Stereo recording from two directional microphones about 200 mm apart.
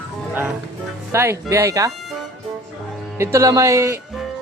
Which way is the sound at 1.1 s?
15° right (ahead or behind).